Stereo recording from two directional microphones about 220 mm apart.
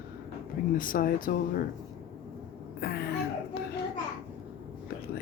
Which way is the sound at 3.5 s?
45° left (ahead or behind).